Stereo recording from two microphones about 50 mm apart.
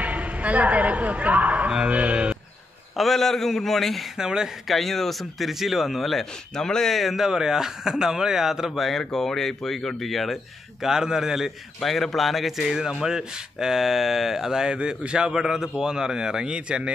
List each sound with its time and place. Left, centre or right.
0.0 s a man's voice: right
1.9 s a sound: right
3.0 s speech: centre
4.2 s speech: centre
4.6 s speech: centre
6.5 s speech: centre
7.2 s speech: centre
11.8 s speech: centre
15.3 s speech: centre